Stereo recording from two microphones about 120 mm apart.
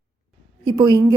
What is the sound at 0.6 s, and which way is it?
Speech, 35° right (ahead or behind).